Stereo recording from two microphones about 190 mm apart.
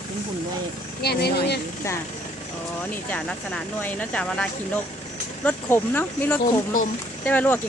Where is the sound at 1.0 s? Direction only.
55° left (ahead or behind).